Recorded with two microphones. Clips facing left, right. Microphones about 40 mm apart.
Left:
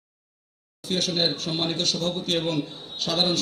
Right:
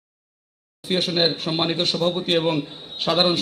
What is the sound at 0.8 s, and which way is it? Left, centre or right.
Speech, right.